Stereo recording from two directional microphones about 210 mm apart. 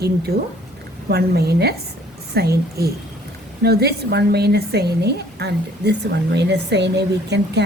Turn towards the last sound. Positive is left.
turn(degrees=-55)  # may be behind; listen again after turning